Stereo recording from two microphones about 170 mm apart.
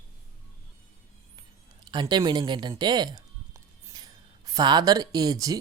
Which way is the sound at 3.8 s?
20° right (ahead or behind).